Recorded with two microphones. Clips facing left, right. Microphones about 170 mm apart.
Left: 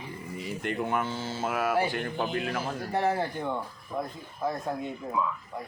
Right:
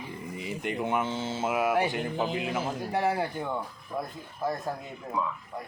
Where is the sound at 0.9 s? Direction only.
20° right (ahead or behind); by 2.5 s 5° right (ahead or behind).